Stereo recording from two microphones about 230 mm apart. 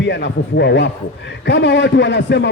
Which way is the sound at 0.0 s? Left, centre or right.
Left.